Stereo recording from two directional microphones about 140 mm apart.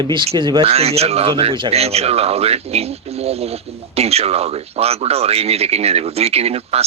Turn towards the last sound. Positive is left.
turn(degrees=-45)  # may be behind; listen again after turning